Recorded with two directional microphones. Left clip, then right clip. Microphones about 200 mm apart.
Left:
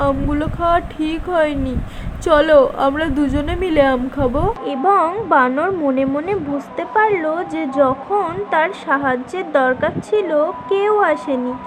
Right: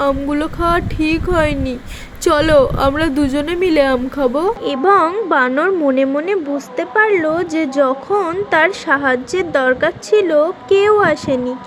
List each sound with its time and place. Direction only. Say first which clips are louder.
0.0 s a woman's voice: right 2 dB; 30° right (ahead or behind)